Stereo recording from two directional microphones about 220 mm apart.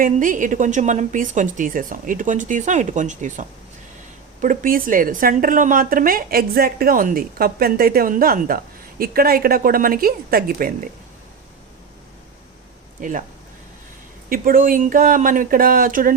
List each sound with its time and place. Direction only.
0.0 s a woman's voice: 35° right (ahead or behind)
13.0 s a woman's voice: 35° right (ahead or behind)
14.3 s a woman's voice: 40° right (ahead or behind)